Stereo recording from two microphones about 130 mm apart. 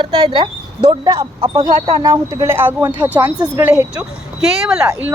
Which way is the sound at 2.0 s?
25° right (ahead or behind).